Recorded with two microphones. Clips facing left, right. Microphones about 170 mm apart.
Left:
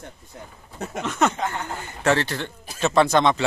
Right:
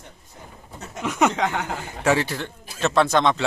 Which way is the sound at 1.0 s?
10° right (ahead or behind).